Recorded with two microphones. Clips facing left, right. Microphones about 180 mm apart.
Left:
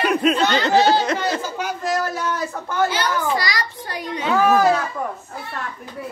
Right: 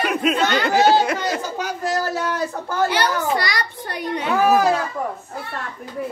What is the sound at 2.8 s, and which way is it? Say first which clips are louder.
A child's voice: right 1 dB; 60° right (ahead or behind).